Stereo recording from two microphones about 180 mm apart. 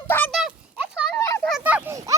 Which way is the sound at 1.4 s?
5° right (ahead or behind).